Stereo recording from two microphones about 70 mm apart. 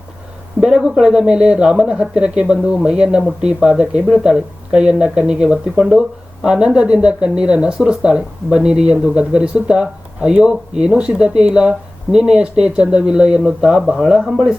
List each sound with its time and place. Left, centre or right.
0.6 s speech: centre